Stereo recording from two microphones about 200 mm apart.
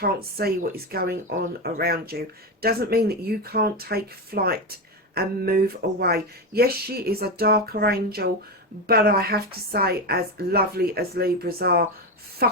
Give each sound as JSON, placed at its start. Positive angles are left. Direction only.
{"t": 0.0, "sound": "speech", "side_deg": -50}